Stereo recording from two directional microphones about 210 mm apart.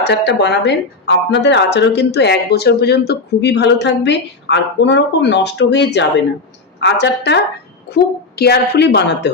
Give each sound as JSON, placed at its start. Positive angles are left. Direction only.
{"t": 0.0, "sound": "a woman's voice", "side_deg": 55}